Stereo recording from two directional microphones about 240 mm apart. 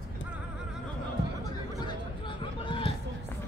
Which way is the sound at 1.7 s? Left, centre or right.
Centre.